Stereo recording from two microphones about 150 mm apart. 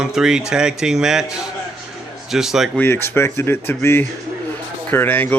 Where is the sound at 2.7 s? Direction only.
15° left (ahead or behind).